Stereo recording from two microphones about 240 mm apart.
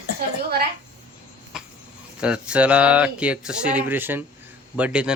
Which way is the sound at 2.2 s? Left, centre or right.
Centre.